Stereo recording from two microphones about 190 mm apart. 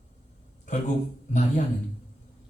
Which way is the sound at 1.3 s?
40° left (ahead or behind).